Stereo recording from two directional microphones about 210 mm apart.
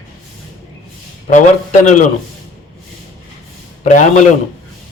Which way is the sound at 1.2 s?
35° left (ahead or behind).